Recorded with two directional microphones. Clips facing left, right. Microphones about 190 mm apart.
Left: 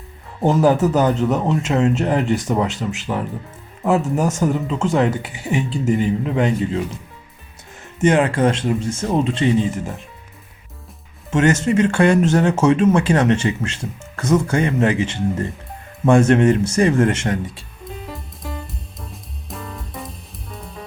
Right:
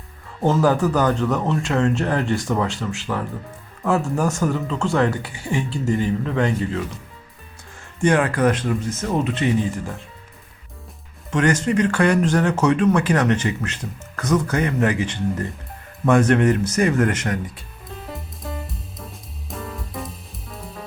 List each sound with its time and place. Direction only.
0.4 s speech: 20° left (ahead or behind)
7.9 s speech: 20° left (ahead or behind)
11.3 s speech: 25° left (ahead or behind)
18.7 s music: centre (ahead or behind)